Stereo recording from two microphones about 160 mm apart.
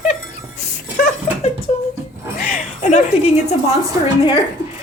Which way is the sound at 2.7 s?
45° left (ahead or behind).